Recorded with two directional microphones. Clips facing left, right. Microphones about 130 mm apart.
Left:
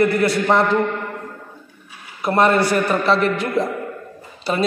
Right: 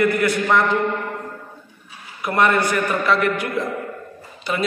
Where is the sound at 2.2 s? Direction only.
35° left (ahead or behind).